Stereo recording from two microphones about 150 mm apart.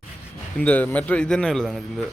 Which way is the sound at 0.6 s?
10° left (ahead or behind).